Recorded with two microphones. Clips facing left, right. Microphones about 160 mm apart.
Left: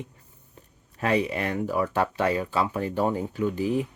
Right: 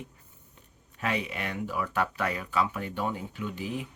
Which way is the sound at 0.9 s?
40° left (ahead or behind).